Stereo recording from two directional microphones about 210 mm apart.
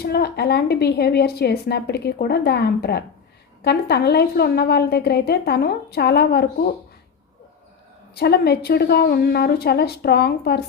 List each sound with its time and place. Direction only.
0.0 s a woman's voice: 50° left (ahead or behind)
8.1 s a woman's voice: 50° left (ahead or behind)